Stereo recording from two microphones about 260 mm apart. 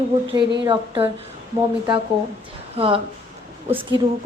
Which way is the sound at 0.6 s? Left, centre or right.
Centre.